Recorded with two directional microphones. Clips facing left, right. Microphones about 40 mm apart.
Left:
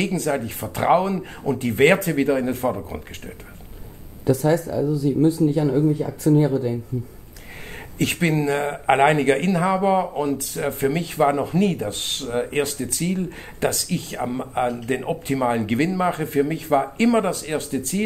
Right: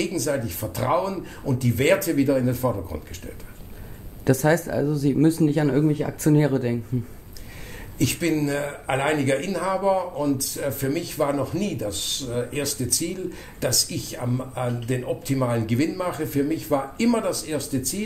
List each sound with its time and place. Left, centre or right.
0.0 s a man's voice: left
4.3 s speech: right
5.8 s speech: right
8.0 s a man's voice: left